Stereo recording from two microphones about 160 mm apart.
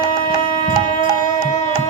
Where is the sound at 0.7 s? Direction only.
50° left (ahead or behind).